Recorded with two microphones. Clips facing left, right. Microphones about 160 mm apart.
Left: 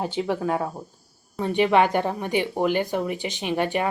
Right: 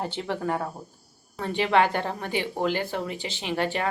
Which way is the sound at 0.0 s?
15° left (ahead or behind).